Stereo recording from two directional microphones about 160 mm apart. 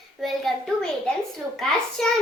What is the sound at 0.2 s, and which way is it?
A child's voice, centre (ahead or behind).